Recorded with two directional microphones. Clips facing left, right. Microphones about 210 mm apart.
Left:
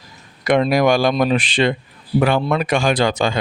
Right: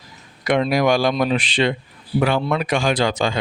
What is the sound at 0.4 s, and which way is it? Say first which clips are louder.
Speech: left 3 dB; 45° left (ahead or behind).